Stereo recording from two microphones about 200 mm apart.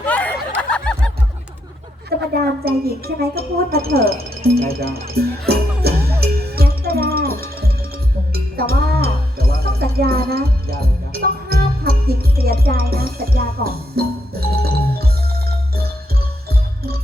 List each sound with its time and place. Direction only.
0.0 s snicker: 5° left (ahead or behind)
2.0 s a woman's voice: 50° right (ahead or behind)
5.1 s music: 50° right (ahead or behind)